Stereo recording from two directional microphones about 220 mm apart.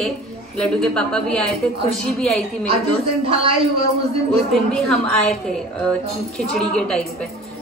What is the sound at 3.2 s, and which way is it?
Speech, 25° right (ahead or behind).